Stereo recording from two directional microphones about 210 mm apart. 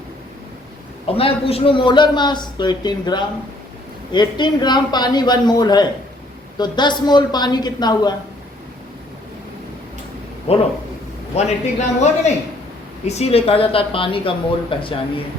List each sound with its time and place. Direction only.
1.0 s a man's voice: 25° left (ahead or behind)
10.5 s a man's voice: 30° left (ahead or behind)